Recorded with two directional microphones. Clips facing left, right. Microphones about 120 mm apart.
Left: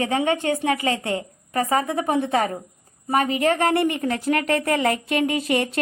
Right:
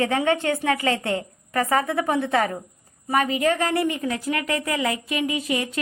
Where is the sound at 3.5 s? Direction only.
55° left (ahead or behind).